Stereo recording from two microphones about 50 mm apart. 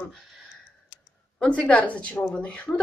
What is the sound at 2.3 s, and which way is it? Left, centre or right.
Speech, centre.